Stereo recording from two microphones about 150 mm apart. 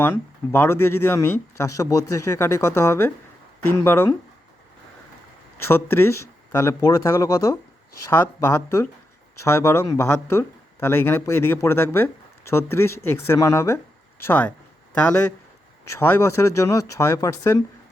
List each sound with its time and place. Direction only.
0.0 s speech: 15° left (ahead or behind)
5.5 s speech: 15° left (ahead or behind)